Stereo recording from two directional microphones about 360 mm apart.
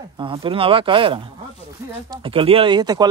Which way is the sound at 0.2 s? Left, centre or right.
Centre.